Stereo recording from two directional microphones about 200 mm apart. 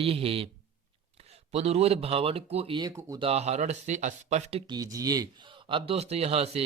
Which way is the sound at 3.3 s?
30° right (ahead or behind).